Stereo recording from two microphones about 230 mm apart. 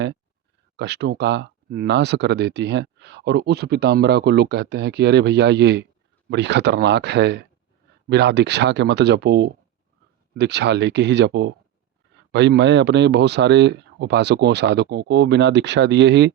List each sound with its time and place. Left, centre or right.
0.8 s speech: right